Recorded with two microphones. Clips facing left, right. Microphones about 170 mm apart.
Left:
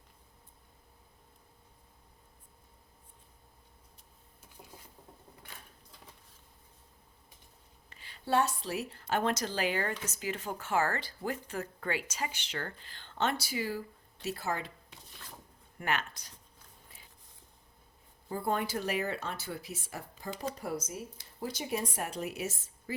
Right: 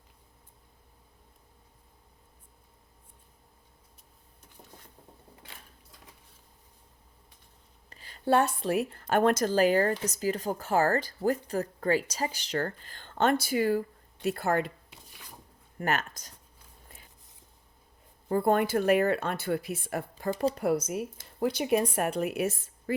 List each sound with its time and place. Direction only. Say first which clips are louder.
7.9 s a woman's voice: right 6 dB; 40° right (ahead or behind); by 14.7 s 55° right (ahead or behind)
15.8 s a woman's voice: right 4 dB; 45° right (ahead or behind)
16.9 s a sound: right 6 dB; 50° right (ahead or behind)
18.3 s speech: right 8 dB; 55° right (ahead or behind)